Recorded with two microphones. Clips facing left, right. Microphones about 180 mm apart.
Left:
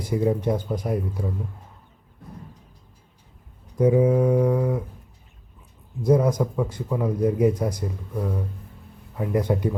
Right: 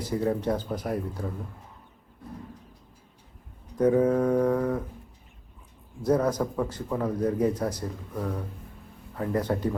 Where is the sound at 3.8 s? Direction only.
10° left (ahead or behind).